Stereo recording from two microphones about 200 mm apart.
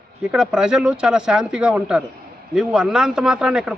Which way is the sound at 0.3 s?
5° right (ahead or behind).